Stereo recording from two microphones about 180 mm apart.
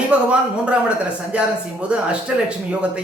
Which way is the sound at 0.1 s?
5° right (ahead or behind).